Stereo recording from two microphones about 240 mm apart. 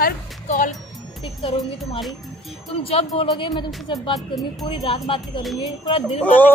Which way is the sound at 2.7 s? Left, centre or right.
Left.